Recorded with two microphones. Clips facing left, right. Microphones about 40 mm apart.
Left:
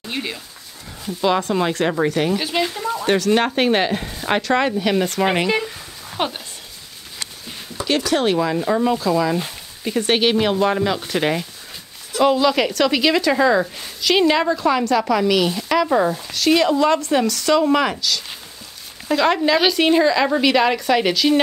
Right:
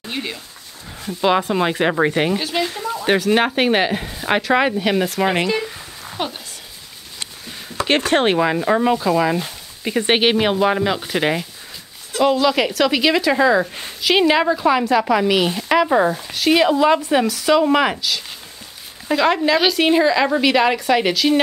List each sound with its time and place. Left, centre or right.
0.0 s dog: centre
1.0 s a woman's voice: centre
2.3 s speech: centre
2.7 s a sound: centre
3.1 s a woman's voice: centre
5.6 s a sound: centre
6.1 s a sound: centre
7.8 s a woman's voice: right; by 13.7 s centre
13.7 s a woman's voice: centre